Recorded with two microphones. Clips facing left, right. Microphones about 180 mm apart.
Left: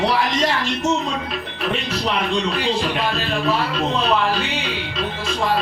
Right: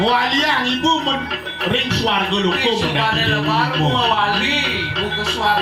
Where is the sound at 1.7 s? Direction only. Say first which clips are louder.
Right 4 dB; 75° right (ahead or behind).